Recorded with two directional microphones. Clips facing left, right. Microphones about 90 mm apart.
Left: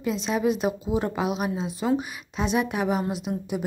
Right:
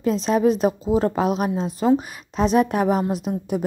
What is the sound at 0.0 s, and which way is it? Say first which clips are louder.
Speech: right 6 dB; 40° right (ahead or behind).